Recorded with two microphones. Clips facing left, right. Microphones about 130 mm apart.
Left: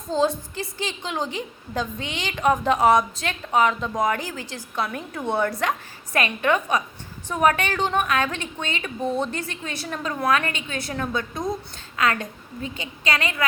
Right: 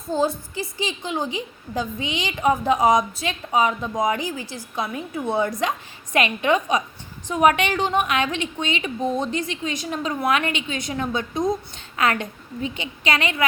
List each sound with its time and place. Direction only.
0.1 s a woman's voice: 10° right (ahead or behind)